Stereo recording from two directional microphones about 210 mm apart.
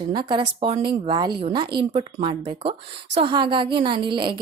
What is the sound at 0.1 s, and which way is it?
A woman's voice, 20° right (ahead or behind).